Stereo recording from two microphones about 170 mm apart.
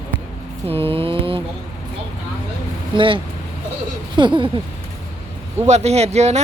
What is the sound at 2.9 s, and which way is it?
Speech, 30° right (ahead or behind).